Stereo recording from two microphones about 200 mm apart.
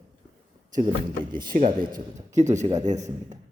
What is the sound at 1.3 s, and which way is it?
A man's voice, 45° right (ahead or behind).